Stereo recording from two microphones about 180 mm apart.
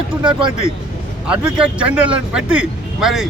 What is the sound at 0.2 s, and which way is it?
Speech, 25° right (ahead or behind).